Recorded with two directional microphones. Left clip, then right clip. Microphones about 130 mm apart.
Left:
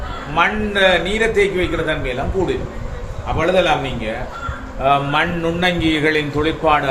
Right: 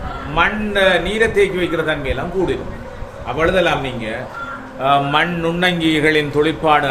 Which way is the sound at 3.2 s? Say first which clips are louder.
Even; 55° right (ahead or behind).